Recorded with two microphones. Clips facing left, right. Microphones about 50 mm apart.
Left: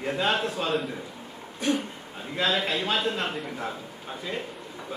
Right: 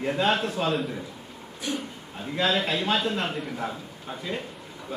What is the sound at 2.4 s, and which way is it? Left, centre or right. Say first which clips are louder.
A man's voice: right 1 dB; centre.